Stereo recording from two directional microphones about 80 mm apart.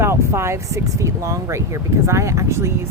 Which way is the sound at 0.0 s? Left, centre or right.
Right.